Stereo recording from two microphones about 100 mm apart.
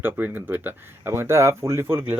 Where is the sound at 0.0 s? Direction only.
20° right (ahead or behind).